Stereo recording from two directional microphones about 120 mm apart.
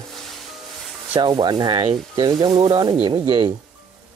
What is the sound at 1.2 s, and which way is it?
Speech, 40° right (ahead or behind).